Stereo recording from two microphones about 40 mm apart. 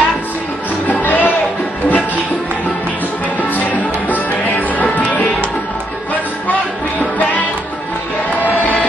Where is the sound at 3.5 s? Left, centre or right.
Left.